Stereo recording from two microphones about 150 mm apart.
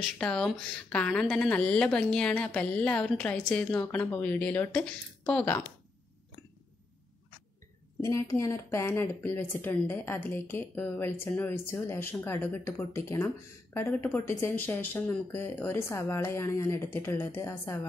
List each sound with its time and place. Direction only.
0.2 s speech: 5° left (ahead or behind)
8.0 s speech: 20° left (ahead or behind)